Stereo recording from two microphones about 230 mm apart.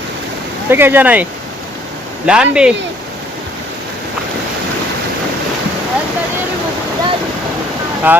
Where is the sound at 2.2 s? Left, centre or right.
Centre.